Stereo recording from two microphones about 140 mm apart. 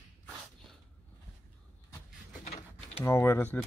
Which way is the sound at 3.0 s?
20° left (ahead or behind).